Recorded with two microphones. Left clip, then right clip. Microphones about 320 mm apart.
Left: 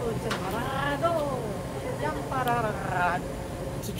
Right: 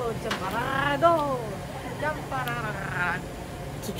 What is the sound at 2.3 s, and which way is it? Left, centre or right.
Speech, centre.